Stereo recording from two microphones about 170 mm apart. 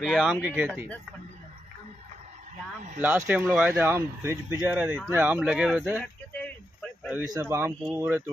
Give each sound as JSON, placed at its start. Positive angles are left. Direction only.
{"t": 0.0, "sound": "speech", "side_deg": 0}
{"t": 3.0, "sound": "speech", "side_deg": -10}
{"t": 6.4, "sound": "a sound", "side_deg": 5}
{"t": 7.2, "sound": "speech", "side_deg": -20}